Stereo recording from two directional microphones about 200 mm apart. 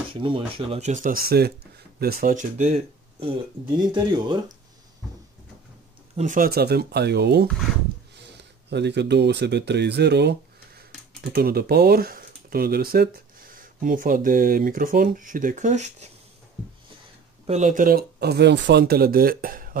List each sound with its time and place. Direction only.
0.1 s speech: 25° right (ahead or behind)
6.1 s speech: 40° right (ahead or behind); by 10.3 s 55° right (ahead or behind)
11.3 s speech: 50° right (ahead or behind)
17.5 s speech: 35° right (ahead or behind)